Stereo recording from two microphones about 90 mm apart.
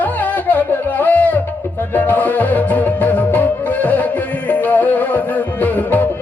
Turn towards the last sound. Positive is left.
turn(degrees=20)  # may be behind; listen again after turning